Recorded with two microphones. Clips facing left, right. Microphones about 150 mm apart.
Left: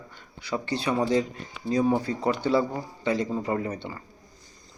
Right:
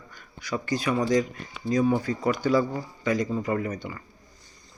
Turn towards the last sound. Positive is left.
turn(degrees=30)  # may be behind; listen again after turning